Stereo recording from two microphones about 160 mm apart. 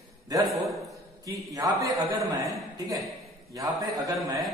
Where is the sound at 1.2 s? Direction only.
20° right (ahead or behind).